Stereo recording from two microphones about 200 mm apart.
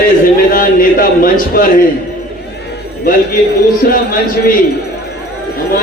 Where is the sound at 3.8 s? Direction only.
45° left (ahead or behind).